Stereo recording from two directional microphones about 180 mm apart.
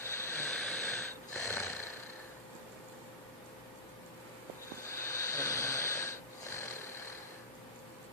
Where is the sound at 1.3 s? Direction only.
15° left (ahead or behind).